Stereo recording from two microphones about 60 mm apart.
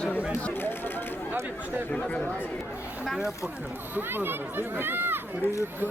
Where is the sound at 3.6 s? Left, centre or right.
Right.